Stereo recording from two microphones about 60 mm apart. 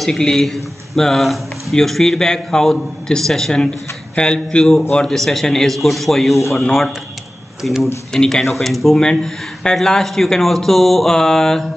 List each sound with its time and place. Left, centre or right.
0.0 s speech: centre